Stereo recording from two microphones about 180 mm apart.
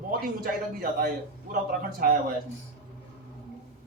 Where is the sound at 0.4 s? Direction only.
55° right (ahead or behind).